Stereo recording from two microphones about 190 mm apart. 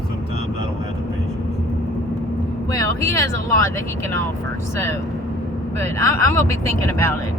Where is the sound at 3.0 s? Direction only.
15° left (ahead or behind).